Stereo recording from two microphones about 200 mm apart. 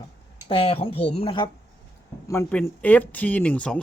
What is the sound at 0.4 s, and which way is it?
Speech, 30° left (ahead or behind).